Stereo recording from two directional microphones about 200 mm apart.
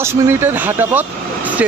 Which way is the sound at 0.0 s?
10° right (ahead or behind).